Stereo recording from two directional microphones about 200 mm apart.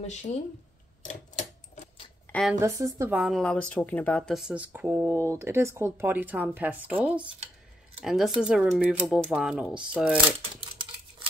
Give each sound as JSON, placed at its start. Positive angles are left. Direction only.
{"t": 0.0, "sound": "speech", "side_deg": 35}
{"t": 1.0, "sound": "typewriter", "side_deg": 40}
{"t": 2.6, "sound": "speech", "side_deg": -15}
{"t": 10.5, "sound": "a sound", "side_deg": -25}